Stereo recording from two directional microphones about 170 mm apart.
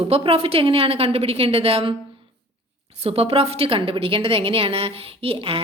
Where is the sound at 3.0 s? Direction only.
35° right (ahead or behind).